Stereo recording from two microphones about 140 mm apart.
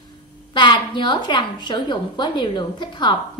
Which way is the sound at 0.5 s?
30° left (ahead or behind).